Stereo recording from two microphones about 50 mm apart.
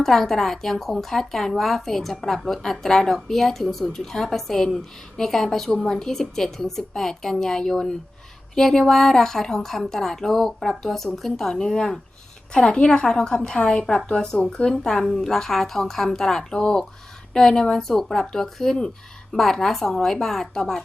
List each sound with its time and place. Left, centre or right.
0.0 s speech: centre